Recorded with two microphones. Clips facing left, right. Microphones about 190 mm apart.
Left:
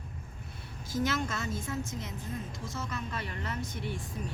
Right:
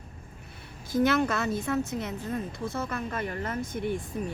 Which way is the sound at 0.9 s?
60° right (ahead or behind).